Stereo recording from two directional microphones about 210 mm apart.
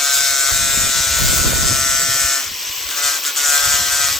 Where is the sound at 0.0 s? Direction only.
Centre (ahead or behind).